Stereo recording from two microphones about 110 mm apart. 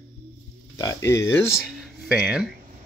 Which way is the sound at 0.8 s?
25° left (ahead or behind).